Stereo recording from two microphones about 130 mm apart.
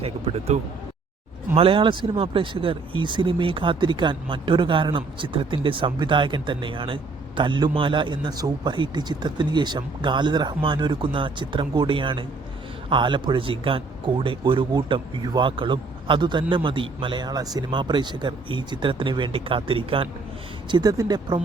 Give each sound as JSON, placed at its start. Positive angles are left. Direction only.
{"t": 0.0, "sound": "speech", "side_deg": -50}
{"t": 20.7, "sound": "speech", "side_deg": -35}